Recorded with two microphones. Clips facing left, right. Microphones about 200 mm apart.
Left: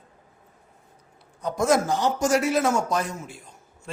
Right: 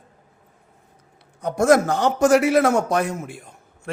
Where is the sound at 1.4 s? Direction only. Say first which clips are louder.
Right 5 dB; 65° right (ahead or behind).